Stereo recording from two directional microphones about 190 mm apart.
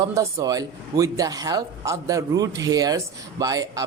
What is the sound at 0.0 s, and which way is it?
Speech, 15° right (ahead or behind).